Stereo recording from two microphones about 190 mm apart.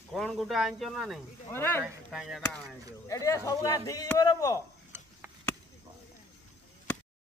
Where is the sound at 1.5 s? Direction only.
10° left (ahead or behind).